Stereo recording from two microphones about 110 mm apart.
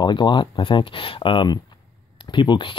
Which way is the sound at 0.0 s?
45° left (ahead or behind).